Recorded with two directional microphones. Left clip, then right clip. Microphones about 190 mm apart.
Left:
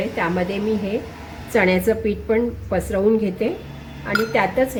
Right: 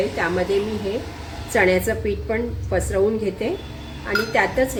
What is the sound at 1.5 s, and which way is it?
A woman's voice, 45° left (ahead or behind).